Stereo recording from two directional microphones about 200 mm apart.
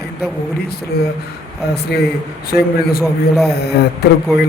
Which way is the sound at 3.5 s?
55° left (ahead or behind).